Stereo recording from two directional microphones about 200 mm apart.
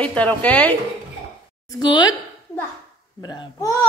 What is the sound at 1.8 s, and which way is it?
Speech, 20° left (ahead or behind).